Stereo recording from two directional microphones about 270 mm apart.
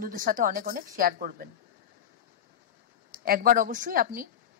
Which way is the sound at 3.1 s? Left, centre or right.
Right.